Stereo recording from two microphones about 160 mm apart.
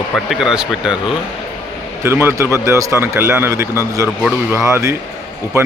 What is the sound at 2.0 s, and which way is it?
A man's voice, 15° right (ahead or behind).